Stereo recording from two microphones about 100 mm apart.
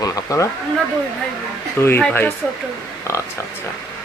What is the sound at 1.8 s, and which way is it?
Speech, 25° left (ahead or behind).